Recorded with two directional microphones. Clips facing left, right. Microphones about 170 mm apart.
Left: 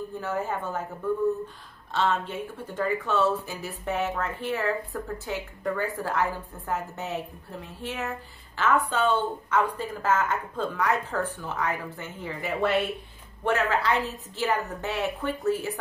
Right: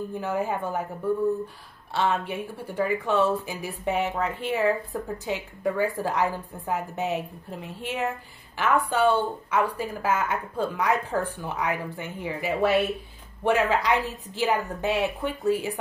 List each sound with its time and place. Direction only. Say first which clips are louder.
0.1 s speech: right 2 dB; 15° right (ahead or behind)
2.0 s speech: right 1 dB; 10° right (ahead or behind)